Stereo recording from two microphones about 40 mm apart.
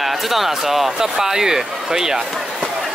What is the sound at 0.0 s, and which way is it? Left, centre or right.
Speech, centre.